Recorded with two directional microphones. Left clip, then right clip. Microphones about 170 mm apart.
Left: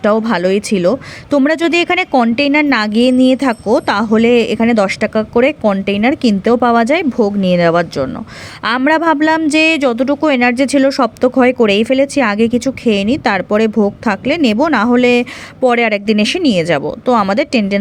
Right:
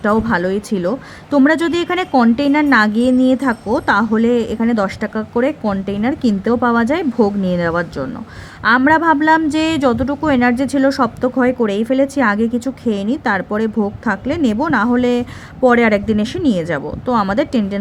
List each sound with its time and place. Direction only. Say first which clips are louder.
0.0 s a woman's voice: left 3 dB; 30° left (ahead or behind)